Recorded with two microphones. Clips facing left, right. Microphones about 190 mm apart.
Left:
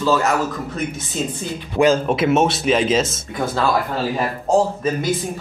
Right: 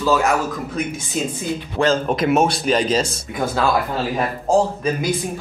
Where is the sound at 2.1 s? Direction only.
Centre (ahead or behind).